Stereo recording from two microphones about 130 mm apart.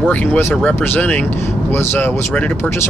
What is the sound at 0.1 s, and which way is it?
Speech, 10° left (ahead or behind).